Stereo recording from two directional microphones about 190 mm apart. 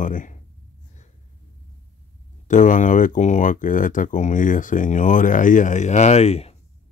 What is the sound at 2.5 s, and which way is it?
Speech, 40° left (ahead or behind).